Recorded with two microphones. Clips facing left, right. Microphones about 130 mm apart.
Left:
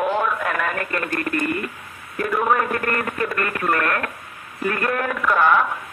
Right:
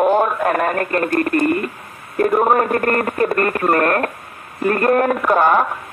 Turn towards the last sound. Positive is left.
turn(degrees=-40)  # may be behind; listen again after turning